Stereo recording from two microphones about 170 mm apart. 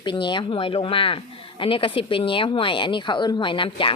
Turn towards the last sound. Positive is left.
turn(degrees=30)  # may be behind; listen again after turning